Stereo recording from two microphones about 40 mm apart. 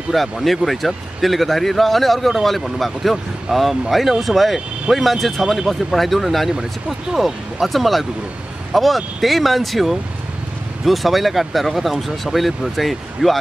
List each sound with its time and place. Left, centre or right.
0.1 s speech: centre
7.6 s speech: centre